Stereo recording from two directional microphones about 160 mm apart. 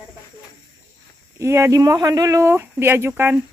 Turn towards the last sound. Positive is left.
turn(degrees=-15)  # may be behind; listen again after turning